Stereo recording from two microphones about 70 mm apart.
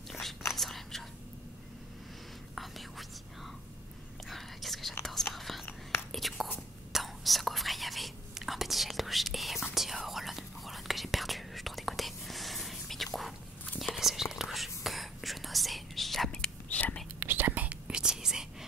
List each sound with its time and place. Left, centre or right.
0.1 s whispering: centre
2.5 s whispering: centre
4.3 s whispering: centre
16.6 s whispering: left
17.2 s whispering: right; by 18.7 s centre